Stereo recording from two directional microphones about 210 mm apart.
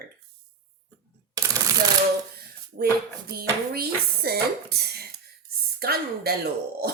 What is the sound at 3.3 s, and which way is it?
A woman's voice, 45° right (ahead or behind).